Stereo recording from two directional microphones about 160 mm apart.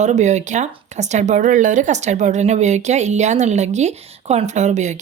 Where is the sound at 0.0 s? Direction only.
45° right (ahead or behind).